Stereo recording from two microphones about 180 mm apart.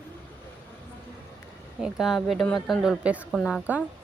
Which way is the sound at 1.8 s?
Centre (ahead or behind).